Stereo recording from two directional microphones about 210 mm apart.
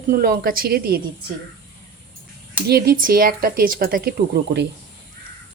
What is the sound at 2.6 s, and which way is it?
A woman's voice, 45° right (ahead or behind).